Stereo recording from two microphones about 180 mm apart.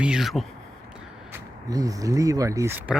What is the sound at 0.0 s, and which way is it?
Speech, 5° right (ahead or behind).